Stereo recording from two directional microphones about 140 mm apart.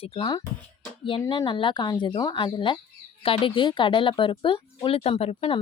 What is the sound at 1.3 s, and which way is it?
Speech, 35° left (ahead or behind).